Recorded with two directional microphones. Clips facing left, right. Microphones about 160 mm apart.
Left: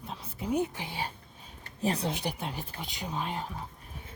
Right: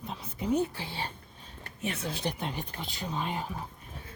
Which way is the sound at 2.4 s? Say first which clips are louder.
Right 1 dB; 5° left (ahead or behind).